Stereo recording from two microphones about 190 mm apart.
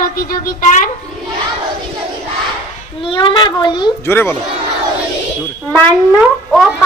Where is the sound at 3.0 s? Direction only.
25° left (ahead or behind).